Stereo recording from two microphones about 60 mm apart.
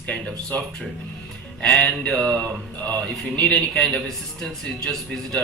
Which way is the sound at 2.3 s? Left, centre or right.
Left.